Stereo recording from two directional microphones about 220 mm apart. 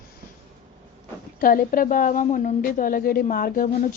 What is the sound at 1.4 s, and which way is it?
Speech, 40° left (ahead or behind).